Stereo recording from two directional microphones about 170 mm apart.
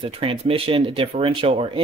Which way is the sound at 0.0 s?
30° right (ahead or behind).